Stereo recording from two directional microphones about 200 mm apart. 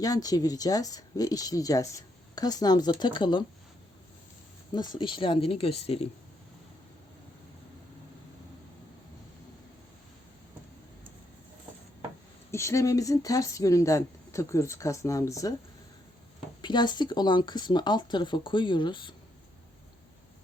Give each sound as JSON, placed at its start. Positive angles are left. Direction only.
{"t": 0.0, "sound": "speech", "side_deg": 20}
{"t": 4.7, "sound": "speech", "side_deg": 20}
{"t": 12.5, "sound": "speech", "side_deg": 15}
{"t": 16.6, "sound": "speech", "side_deg": 20}